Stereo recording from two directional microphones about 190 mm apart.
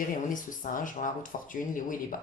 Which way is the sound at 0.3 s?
45° left (ahead or behind).